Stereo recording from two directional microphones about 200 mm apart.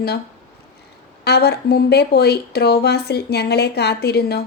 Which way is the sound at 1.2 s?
55° left (ahead or behind).